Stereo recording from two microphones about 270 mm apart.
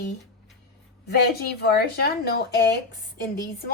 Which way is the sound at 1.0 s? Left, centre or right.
Left.